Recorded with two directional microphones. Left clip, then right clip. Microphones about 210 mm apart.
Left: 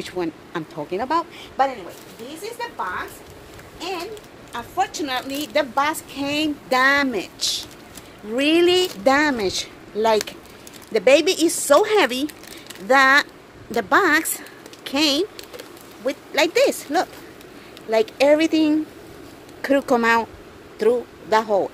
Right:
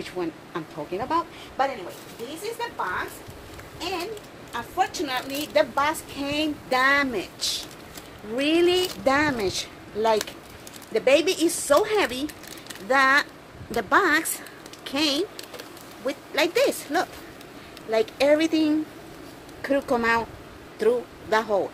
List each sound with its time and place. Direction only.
0.0 s a woman's voice: 45° left (ahead or behind)
4.5 s a woman's voice: 50° left (ahead or behind); by 18.8 s 25° left (ahead or behind)
19.6 s speech: 40° left (ahead or behind)
20.8 s speech: 20° left (ahead or behind)